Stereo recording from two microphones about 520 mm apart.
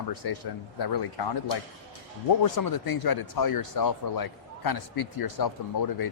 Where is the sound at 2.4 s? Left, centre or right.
Left.